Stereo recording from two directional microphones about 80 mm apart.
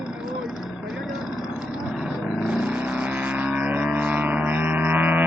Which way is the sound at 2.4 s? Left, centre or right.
Centre.